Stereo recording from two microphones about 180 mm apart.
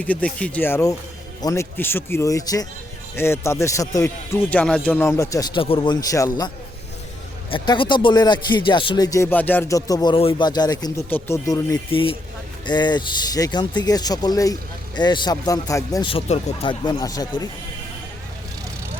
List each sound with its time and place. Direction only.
0.0 s speech: 10° left (ahead or behind)
7.5 s speech: 25° left (ahead or behind)
11.9 s speech: 30° left (ahead or behind)